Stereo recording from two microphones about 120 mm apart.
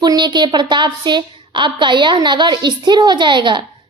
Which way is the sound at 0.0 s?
40° right (ahead or behind).